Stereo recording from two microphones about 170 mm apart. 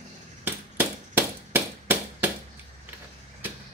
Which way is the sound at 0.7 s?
10° right (ahead or behind).